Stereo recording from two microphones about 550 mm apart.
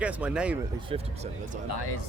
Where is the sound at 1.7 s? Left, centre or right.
Left.